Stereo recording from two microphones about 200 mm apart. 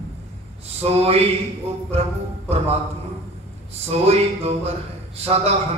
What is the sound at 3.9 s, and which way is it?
Mantra, 30° right (ahead or behind).